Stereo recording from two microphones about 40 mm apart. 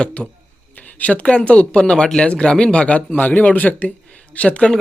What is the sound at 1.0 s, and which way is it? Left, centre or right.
Speech, left.